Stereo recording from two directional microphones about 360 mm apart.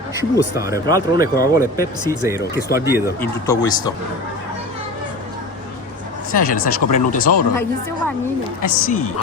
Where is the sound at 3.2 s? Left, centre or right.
Centre.